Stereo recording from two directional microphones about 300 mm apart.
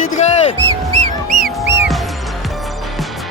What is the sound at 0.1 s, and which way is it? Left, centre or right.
Basketball bounce, left.